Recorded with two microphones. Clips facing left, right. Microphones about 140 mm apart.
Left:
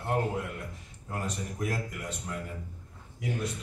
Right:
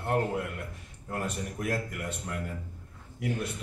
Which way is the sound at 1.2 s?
55° right (ahead or behind).